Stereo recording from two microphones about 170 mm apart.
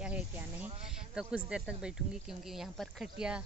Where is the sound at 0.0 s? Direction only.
5° right (ahead or behind).